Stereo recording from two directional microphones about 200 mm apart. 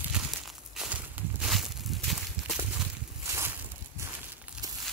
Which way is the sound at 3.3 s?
15° right (ahead or behind).